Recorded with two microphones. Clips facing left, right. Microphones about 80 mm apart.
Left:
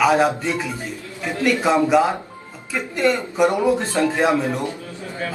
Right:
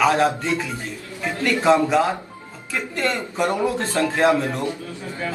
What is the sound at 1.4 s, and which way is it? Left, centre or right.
A man's voice, centre.